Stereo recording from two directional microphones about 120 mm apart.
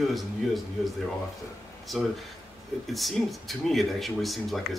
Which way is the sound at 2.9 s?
Centre (ahead or behind).